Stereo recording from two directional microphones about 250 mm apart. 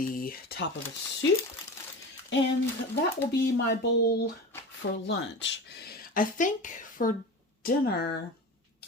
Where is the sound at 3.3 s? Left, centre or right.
Left.